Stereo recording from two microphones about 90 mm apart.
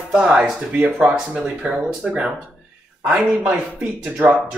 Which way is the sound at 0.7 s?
20° right (ahead or behind).